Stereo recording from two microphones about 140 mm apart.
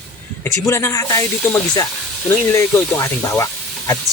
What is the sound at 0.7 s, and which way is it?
Speech, 20° left (ahead or behind).